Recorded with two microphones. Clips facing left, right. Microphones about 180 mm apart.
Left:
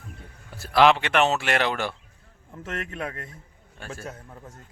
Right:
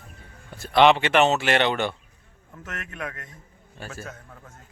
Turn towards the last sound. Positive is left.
turn(degrees=0)  # may be behind; listen again after turning